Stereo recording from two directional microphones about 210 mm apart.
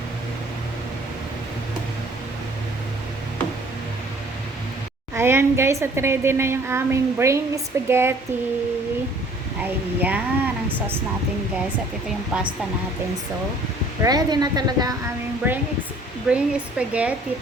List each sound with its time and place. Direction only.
5.1 s a woman's voice: 10° right (ahead or behind)
9.6 s a woman's voice: 10° right (ahead or behind)
14.0 s a woman's voice: 20° right (ahead or behind)
16.3 s speech: 5° right (ahead or behind)